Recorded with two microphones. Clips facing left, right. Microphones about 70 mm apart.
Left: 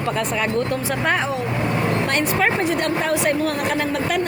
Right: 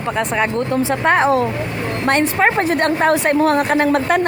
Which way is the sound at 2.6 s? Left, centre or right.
Right.